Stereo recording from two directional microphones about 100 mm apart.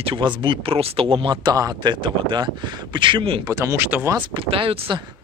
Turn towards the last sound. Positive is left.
turn(degrees=-60)  # may be behind; listen again after turning